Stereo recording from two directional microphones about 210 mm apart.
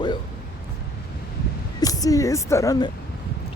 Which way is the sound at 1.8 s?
15° left (ahead or behind).